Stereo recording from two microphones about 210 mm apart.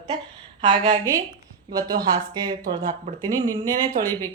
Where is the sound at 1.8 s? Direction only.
20° right (ahead or behind).